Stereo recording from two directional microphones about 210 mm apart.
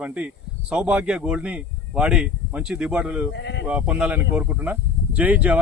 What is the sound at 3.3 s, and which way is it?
Speech, 55° left (ahead or behind).